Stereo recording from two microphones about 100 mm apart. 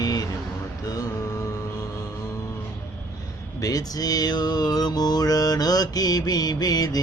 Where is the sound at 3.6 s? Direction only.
40° left (ahead or behind).